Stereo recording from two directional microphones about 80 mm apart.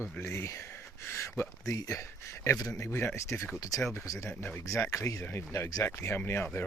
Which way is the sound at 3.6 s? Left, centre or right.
Left.